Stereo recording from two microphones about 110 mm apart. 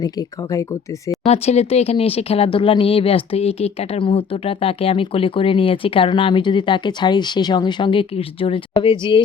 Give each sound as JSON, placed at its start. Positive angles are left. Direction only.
{"t": 0.0, "sound": "speech", "side_deg": 35}
{"t": 1.3, "sound": "speech", "side_deg": 75}